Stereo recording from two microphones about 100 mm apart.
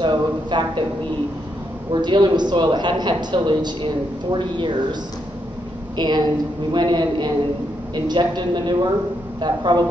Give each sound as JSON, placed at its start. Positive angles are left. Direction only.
{"t": 0.0, "sound": "a man's voice", "side_deg": -50}
{"t": 1.9, "sound": "a man's voice", "side_deg": -50}
{"t": 5.9, "sound": "a man's voice", "side_deg": -45}